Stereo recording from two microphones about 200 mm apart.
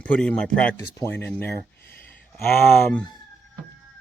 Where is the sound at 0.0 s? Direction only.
5° left (ahead or behind).